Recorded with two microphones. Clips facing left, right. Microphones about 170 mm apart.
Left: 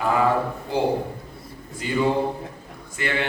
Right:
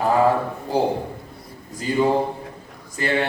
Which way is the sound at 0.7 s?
40° right (ahead or behind).